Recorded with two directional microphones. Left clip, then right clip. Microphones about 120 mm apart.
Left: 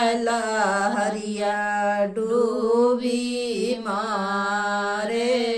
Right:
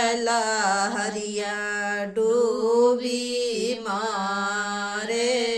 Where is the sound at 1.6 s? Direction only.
40° right (ahead or behind).